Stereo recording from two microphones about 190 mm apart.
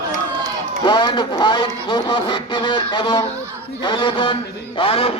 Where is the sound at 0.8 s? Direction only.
25° left (ahead or behind).